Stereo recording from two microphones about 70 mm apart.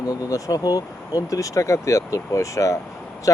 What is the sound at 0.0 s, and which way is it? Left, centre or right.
Speech, left.